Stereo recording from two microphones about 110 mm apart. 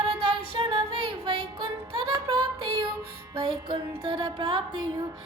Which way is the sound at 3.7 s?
45° right (ahead or behind).